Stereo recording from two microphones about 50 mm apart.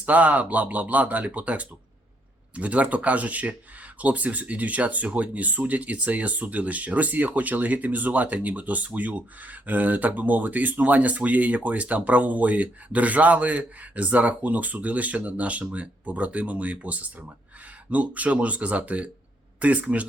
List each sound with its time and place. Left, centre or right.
0.0 s speech: right